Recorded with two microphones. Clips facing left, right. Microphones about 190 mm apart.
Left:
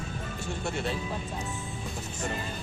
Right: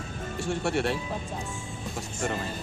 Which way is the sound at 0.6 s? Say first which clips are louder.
Right 5 dB; 75° right (ahead or behind).